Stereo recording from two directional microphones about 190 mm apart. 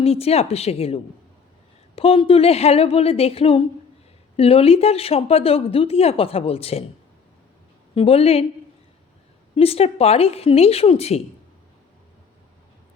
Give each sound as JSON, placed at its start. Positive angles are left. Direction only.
{"t": 0.0, "sound": "speech", "side_deg": 30}
{"t": 7.9, "sound": "speech", "side_deg": 30}
{"t": 9.6, "sound": "speech", "side_deg": 30}